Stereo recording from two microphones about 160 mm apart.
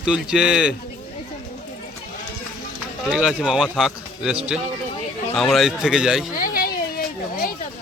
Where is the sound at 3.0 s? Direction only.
5° right (ahead or behind).